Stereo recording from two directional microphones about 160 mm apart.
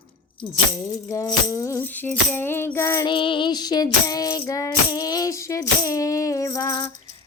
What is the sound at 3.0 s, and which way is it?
Music, 30° left (ahead or behind).